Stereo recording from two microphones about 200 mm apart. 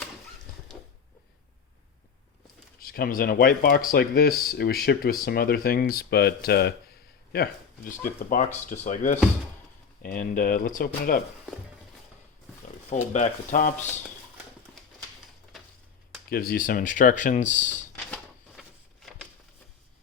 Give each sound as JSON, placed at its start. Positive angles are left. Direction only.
{"t": 2.8, "sound": "speech", "side_deg": 50}
{"t": 8.3, "sound": "speech", "side_deg": 35}
{"t": 13.1, "sound": "speech", "side_deg": 40}
{"t": 14.8, "sound": "a sound", "side_deg": 0}
{"t": 16.3, "sound": "speech", "side_deg": 50}
{"t": 17.9, "sound": "a sound", "side_deg": 10}